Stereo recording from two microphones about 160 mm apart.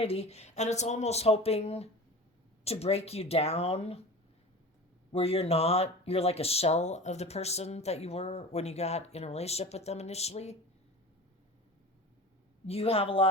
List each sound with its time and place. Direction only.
0.0 s speech: 40° left (ahead or behind)
5.1 s speech: 40° left (ahead or behind)
12.6 s speech: 40° left (ahead or behind)